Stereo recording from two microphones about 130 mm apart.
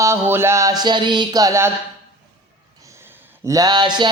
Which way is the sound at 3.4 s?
30° right (ahead or behind).